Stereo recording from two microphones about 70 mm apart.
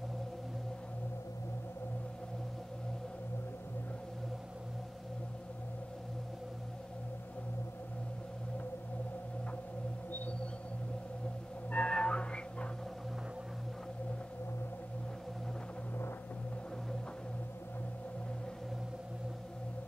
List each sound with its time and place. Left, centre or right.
11.7 s music: centre